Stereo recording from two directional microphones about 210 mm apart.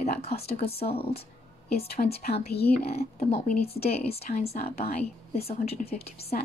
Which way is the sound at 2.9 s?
30° left (ahead or behind).